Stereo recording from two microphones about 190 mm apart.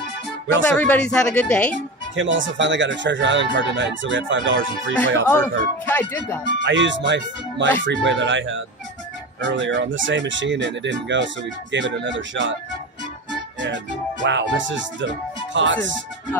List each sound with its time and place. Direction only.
0.7 s speech: 10° left (ahead or behind)
2.1 s speech: 80° right
5.3 s speech: 10° left (ahead or behind)
6.6 s speech: 70° right (ahead or behind)
14.2 s speech: 75° right (ahead or behind)